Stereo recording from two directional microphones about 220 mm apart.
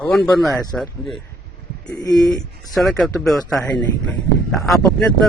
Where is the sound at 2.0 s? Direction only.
15° left (ahead or behind).